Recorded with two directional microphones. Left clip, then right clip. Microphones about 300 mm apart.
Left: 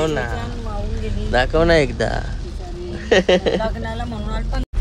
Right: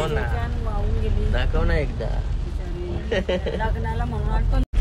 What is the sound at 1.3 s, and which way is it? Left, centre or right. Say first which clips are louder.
Speech: left 13 dB; left.